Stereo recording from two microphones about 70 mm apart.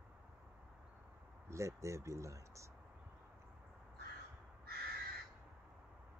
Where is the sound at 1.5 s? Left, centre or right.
Right.